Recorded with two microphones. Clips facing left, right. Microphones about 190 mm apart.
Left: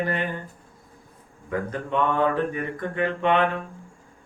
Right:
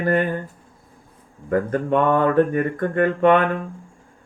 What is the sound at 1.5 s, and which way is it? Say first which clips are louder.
Mantra: right 7 dB; 50° right (ahead or behind).